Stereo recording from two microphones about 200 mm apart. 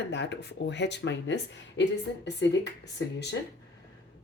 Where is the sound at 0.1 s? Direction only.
60° left (ahead or behind).